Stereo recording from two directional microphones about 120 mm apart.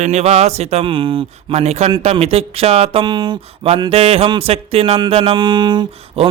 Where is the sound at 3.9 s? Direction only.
55° right (ahead or behind).